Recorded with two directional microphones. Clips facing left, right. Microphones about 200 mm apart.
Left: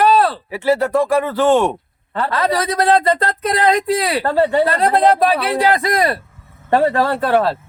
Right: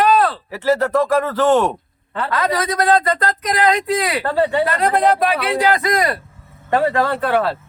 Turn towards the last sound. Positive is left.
turn(degrees=35)  # may be behind; listen again after turning